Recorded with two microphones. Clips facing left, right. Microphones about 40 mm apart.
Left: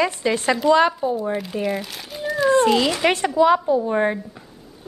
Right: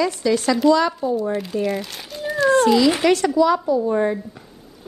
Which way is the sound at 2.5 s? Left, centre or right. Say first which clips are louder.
Right 2 dB; left.